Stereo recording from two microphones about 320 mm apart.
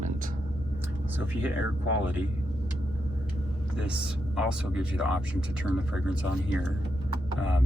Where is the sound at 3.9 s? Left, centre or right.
Centre.